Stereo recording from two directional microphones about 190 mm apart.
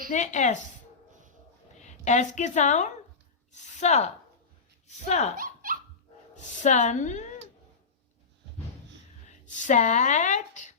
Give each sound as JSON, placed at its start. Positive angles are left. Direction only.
{"t": 0.1, "sound": "speech", "side_deg": 40}
{"t": 1.8, "sound": "a woman's voice", "side_deg": 40}
{"t": 5.4, "sound": "dog", "side_deg": -45}
{"t": 6.3, "sound": "speech", "side_deg": 40}
{"t": 9.3, "sound": "speech", "side_deg": 40}